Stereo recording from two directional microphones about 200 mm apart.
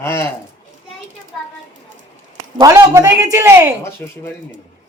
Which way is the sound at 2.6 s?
15° right (ahead or behind).